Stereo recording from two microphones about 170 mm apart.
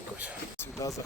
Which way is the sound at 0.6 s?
15° left (ahead or behind).